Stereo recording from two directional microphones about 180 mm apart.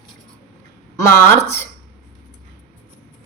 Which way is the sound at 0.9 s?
15° left (ahead or behind).